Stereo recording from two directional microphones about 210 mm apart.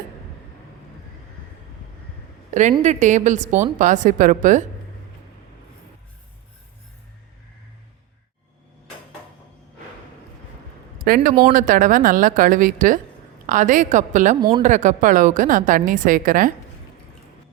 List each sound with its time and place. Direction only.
2.5 s a woman's voice: 35° right (ahead or behind)
11.0 s a man's voice: 40° right (ahead or behind)